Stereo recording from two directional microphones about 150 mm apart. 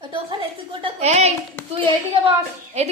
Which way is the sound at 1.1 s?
50° right (ahead or behind).